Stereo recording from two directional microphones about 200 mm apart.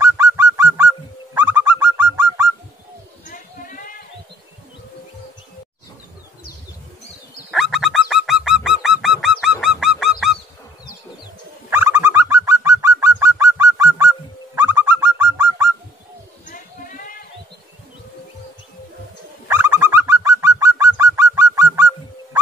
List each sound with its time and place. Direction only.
0.0 s bird: 15° right (ahead or behind)
3.3 s a sound: 40° left (ahead or behind)
7.5 s bird: centre (ahead or behind)
11.7 s bird: 10° right (ahead or behind)
16.4 s a sound: 40° left (ahead or behind)
19.4 s bird: 10° right (ahead or behind)